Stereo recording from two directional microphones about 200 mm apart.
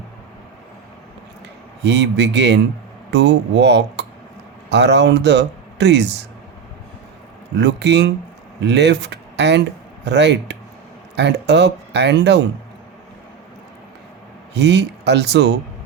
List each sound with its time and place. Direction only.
1.8 s speech: 60° right (ahead or behind)
7.6 s speech: 60° right (ahead or behind)
14.5 s speech: 60° right (ahead or behind)